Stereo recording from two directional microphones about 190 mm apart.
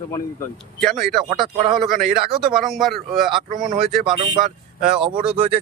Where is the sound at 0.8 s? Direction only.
Centre (ahead or behind).